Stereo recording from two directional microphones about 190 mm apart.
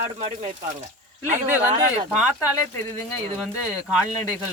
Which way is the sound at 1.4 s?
10° right (ahead or behind).